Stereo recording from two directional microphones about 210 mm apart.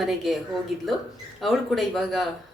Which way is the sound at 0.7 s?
Centre (ahead or behind).